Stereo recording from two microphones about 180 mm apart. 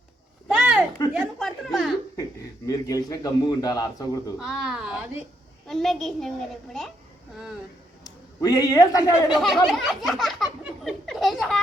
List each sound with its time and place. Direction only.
0.5 s a sound: 5° right (ahead or behind)
1.1 s speech: 5° right (ahead or behind)
2.6 s a man's voice: 20° left (ahead or behind)
4.4 s speech: centre (ahead or behind)
8.0 s a man's voice: 20° left (ahead or behind)
9.3 s speech: centre (ahead or behind)